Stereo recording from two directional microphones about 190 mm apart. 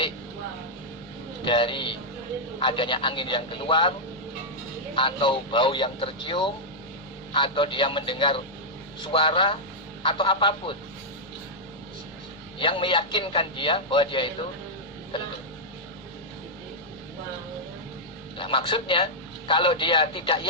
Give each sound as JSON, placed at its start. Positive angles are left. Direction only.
{"t": 1.5, "sound": "a man's voice", "side_deg": 25}
{"t": 4.9, "sound": "a man's voice", "side_deg": 25}
{"t": 12.5, "sound": "a man's voice", "side_deg": 25}
{"t": 18.3, "sound": "a man's voice", "side_deg": 25}